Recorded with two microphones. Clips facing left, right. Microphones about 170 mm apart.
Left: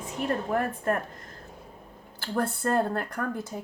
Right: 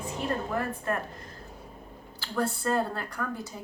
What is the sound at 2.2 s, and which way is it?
Speech, 50° left (ahead or behind).